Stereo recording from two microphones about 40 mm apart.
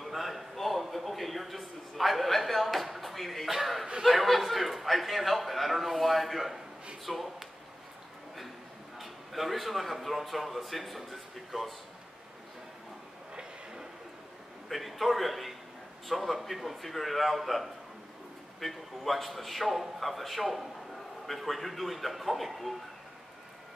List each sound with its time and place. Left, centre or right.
0.0 s a man's voice: centre
8.9 s a man's voice: centre
13.3 s a sound: right
14.7 s a man's voice: centre